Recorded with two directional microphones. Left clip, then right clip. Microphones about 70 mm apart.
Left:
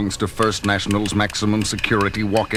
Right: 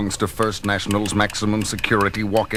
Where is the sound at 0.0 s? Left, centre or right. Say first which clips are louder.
Left 1 dB; left.